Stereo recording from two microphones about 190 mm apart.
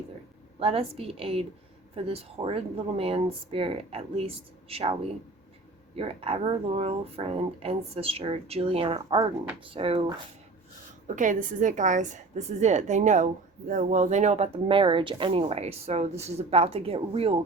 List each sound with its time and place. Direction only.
0.6 s a woman's voice: 30° right (ahead or behind)
6.0 s a woman's voice: 30° right (ahead or behind)
11.1 s a woman's voice: 45° right (ahead or behind)